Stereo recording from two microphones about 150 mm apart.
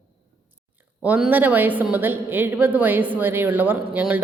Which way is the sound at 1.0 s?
10° right (ahead or behind).